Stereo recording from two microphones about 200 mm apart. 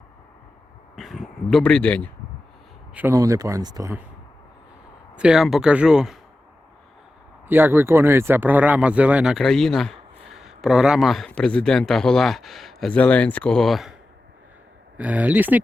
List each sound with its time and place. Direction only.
0.9 s a sound: centre (ahead or behind)
2.9 s speech: 10° right (ahead or behind)
5.1 s speech: 5° right (ahead or behind)
7.4 s speech: 10° right (ahead or behind)
14.9 s speech: 5° right (ahead or behind)